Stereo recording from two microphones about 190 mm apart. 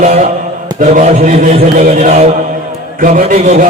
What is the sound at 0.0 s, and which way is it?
A man's voice, 40° right (ahead or behind).